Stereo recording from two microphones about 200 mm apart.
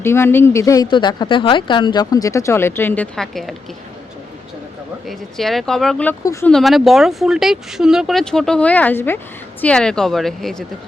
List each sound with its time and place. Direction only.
0.0 s speech: 10° left (ahead or behind)
5.0 s speech: centre (ahead or behind)
6.5 s speech: centre (ahead or behind)